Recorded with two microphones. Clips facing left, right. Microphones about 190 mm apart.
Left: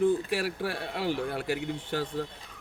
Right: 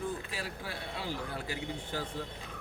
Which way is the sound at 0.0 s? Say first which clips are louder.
Left 12 dB; 75° left (ahead or behind).